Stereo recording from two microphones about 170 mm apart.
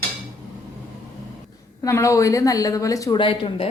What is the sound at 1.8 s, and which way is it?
Speech, 20° left (ahead or behind).